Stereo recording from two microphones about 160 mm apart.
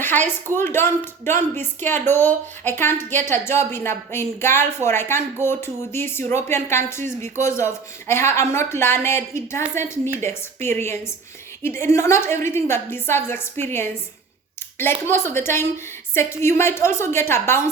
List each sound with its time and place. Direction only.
0.3 s speech: 15° left (ahead or behind)